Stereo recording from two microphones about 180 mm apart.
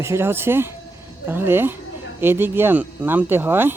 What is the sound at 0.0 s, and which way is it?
Speech, 15° right (ahead or behind).